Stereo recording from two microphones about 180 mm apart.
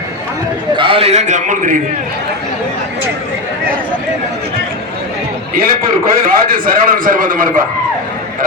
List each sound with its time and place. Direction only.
0.8 s a man's voice: 30° right (ahead or behind)
5.5 s a man's voice: 55° right (ahead or behind)